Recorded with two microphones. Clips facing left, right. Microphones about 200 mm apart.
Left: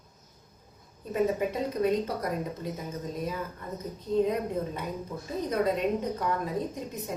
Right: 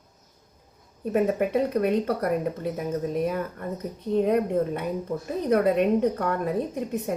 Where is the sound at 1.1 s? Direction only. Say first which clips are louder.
Right 4 dB; 65° right (ahead or behind).